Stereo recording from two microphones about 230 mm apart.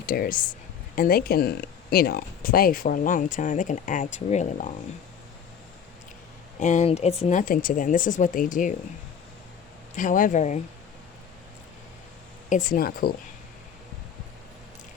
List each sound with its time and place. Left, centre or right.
0.0 s speech: left
6.6 s speech: left
9.9 s speech: left
12.5 s speech: left